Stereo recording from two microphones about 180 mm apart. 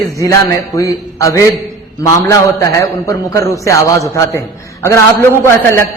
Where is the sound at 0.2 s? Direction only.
15° left (ahead or behind).